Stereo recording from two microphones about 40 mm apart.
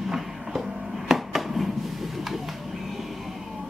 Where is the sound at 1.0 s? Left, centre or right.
Centre.